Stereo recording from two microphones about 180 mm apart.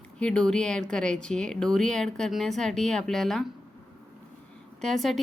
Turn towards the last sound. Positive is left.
turn(degrees=0)  # may be behind; listen again after turning